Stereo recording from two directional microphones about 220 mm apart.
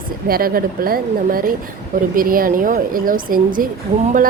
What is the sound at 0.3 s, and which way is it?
Speech, 40° right (ahead or behind).